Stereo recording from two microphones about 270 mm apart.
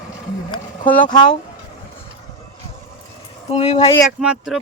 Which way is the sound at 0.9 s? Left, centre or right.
Centre.